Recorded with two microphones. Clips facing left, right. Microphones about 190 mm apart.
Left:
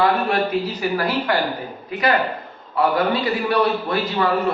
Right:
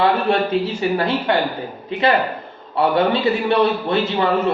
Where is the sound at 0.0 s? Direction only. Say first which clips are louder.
Right 2 dB; 25° right (ahead or behind).